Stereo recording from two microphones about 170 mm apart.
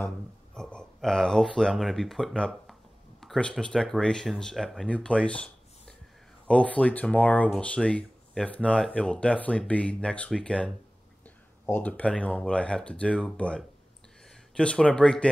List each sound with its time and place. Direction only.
0.6 s speech: 5° left (ahead or behind)